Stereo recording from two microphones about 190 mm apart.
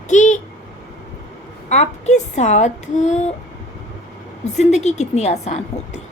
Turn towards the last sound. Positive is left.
turn(degrees=35)  # may be behind; listen again after turning